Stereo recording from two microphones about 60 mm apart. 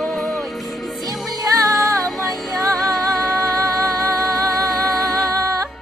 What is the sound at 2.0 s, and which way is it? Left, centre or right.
Music, centre.